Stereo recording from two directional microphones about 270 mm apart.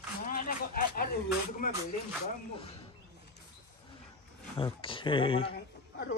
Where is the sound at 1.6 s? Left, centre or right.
Left.